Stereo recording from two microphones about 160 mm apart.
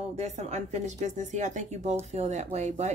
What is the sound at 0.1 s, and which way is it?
A woman's voice, 45° right (ahead or behind).